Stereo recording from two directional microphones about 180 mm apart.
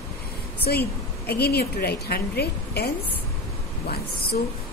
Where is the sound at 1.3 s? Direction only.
60° left (ahead or behind).